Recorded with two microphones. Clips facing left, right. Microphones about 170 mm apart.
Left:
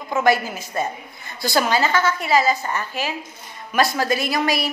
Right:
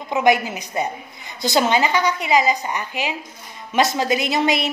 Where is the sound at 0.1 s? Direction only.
20° right (ahead or behind).